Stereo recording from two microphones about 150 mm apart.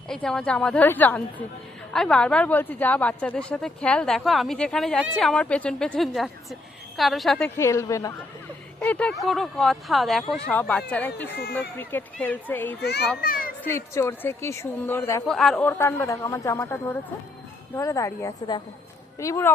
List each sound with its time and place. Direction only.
0.1 s a woman's voice: 5° left (ahead or behind)
7.6 s a woman's voice: 20° left (ahead or behind)
8.8 s a woman's voice: 10° left (ahead or behind)
12.8 s a child's voice: 90° left
13.2 s children playing: 70° left (ahead or behind)
13.7 s speech: 15° left (ahead or behind)
15.3 s a woman's voice: centre (ahead or behind)
15.5 s a woman's voice: 15° left (ahead or behind)